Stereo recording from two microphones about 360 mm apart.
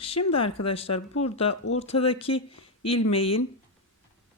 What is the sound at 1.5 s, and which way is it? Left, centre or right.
Speech, left.